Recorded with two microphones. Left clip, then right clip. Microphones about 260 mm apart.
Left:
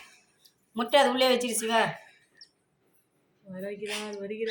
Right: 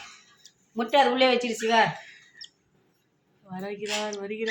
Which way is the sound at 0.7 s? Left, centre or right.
Centre.